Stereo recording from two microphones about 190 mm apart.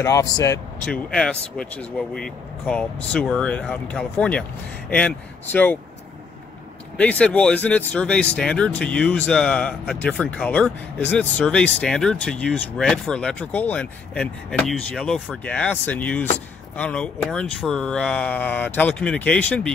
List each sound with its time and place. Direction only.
0.0 s speech: 15° left (ahead or behind)
0.8 s speech: 5° left (ahead or behind)
7.0 s speech: 5° left (ahead or behind)